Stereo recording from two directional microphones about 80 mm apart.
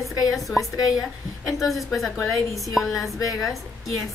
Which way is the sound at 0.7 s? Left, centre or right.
Left.